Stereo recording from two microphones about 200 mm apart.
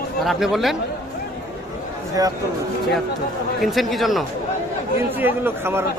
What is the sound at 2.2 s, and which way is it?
Speech, 15° right (ahead or behind).